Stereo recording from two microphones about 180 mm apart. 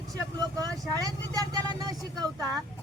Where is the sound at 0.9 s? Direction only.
20° right (ahead or behind).